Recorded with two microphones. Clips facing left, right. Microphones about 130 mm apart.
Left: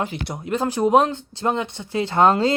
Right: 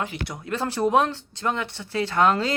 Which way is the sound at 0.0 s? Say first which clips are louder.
Left 3 dB; 25° left (ahead or behind).